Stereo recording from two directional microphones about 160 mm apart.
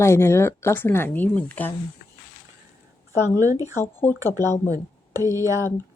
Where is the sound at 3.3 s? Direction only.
20° right (ahead or behind).